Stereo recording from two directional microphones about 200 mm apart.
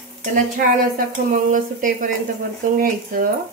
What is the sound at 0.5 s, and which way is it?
Stir, 40° right (ahead or behind).